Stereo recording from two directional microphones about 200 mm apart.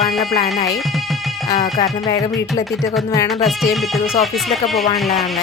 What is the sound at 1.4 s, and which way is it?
Music, 20° left (ahead or behind).